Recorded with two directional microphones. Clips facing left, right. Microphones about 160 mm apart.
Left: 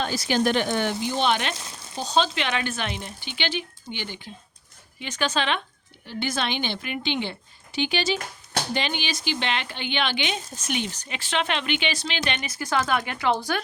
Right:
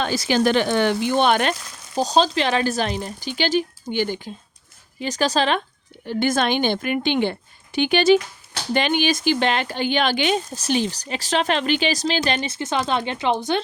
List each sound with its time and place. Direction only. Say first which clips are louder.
0.0 s speech: right 4 dB; 90° right; by 1.5 s 50° right (ahead or behind)
2.0 s speech: right 6 dB; 35° right (ahead or behind)
6.1 s a woman's voice: right 8 dB; 50° right (ahead or behind); by 13.6 s 20° right (ahead or behind)